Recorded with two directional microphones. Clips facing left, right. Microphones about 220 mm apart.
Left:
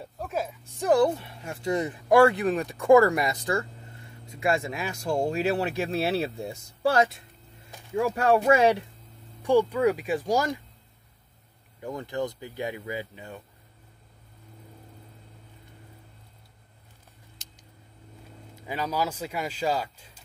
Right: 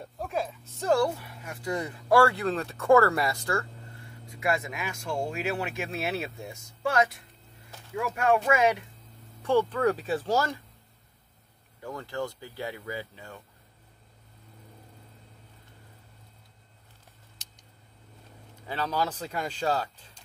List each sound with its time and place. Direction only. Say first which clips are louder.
0.0 s speech: even; 5° left (ahead or behind); by 8.8 s 35° left (ahead or behind)
9.4 s speech: left 3 dB; 15° left (ahead or behind)
11.8 s speech: left 3 dB; 20° left (ahead or behind)
18.7 s speech: left 1 dB; 10° left (ahead or behind)